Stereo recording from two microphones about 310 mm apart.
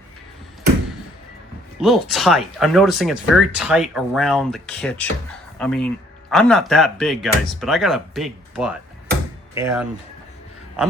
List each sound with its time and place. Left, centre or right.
1.8 s speech: centre